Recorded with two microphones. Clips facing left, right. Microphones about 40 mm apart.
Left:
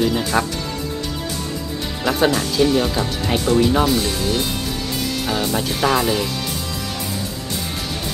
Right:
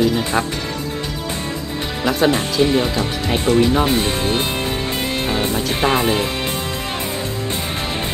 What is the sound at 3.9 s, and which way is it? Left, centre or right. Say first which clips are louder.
Speech: right 2 dB; right.